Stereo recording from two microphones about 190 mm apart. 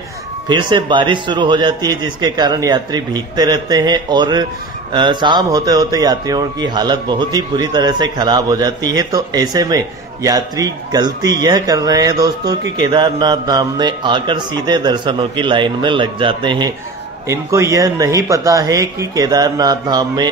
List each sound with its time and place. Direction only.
0.5 s speech: 25° right (ahead or behind)